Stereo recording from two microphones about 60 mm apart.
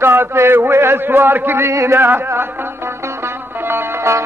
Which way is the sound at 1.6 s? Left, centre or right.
Right.